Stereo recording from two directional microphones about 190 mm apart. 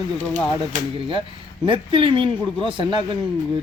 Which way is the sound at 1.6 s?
25° right (ahead or behind).